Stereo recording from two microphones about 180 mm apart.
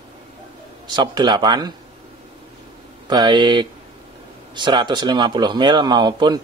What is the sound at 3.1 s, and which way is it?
Speech, 25° right (ahead or behind).